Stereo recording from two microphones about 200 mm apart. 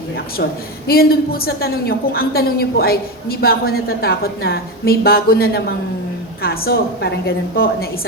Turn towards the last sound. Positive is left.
turn(degrees=50)  # may be behind; listen again after turning